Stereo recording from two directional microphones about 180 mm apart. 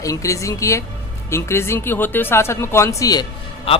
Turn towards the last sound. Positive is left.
turn(degrees=30)  # may be behind; listen again after turning